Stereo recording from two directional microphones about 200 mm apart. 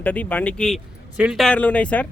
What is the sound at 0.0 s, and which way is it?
Speech, 10° left (ahead or behind).